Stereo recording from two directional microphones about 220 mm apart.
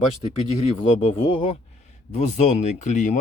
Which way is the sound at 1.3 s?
25° left (ahead or behind).